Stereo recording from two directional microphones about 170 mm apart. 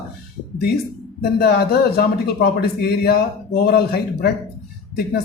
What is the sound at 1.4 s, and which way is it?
A man's voice, 70° left (ahead or behind).